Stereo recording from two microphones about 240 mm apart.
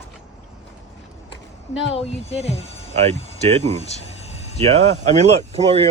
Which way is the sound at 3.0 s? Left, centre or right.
Right.